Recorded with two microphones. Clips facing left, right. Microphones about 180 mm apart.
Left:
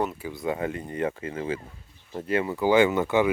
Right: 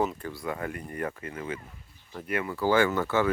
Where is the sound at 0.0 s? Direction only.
5° left (ahead or behind).